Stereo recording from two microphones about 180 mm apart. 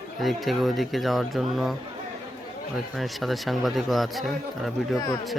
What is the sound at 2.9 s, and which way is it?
Speech, centre (ahead or behind).